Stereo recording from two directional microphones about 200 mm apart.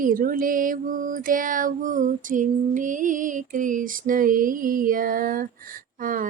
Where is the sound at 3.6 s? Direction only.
40° right (ahead or behind).